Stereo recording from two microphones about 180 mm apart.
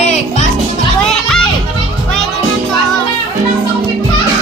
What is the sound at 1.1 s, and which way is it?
Children playing, centre (ahead or behind).